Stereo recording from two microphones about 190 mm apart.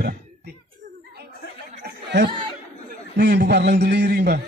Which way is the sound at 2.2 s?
25° right (ahead or behind).